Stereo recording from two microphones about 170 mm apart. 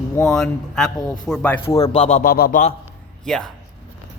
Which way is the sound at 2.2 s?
60° left (ahead or behind).